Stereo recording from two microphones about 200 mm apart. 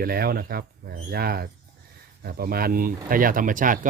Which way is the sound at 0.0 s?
50° right (ahead or behind).